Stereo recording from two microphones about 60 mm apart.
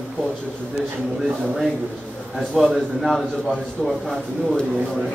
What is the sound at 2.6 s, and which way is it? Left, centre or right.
Speech, centre.